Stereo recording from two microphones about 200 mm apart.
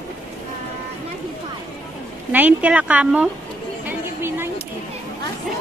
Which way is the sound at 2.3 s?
10° right (ahead or behind).